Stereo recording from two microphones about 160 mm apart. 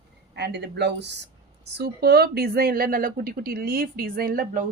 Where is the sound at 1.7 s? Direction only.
80° right.